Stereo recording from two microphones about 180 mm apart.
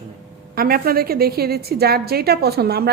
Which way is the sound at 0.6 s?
55° right (ahead or behind).